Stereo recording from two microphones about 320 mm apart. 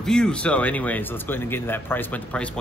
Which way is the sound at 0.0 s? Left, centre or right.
Centre.